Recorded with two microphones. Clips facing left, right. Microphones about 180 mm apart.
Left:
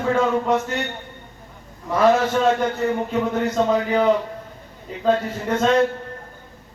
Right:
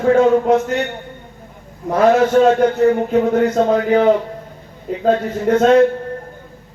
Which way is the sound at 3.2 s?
60° right (ahead or behind).